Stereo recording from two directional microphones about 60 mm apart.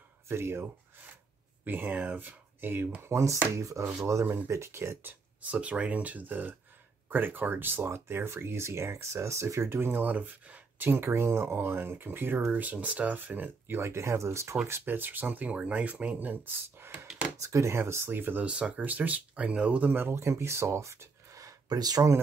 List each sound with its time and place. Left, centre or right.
0.3 s speech: right
3.0 s speech: right
5.4 s speech: right
10.9 s speech: right
13.7 s speech: right
14.7 s speech: right
17.4 s speech: right
18.1 s speech: right
18.4 s speech: right
20.2 s speech: right